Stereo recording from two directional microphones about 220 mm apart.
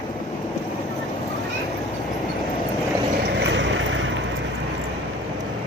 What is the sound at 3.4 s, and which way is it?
Vehicle, 55° right (ahead or behind).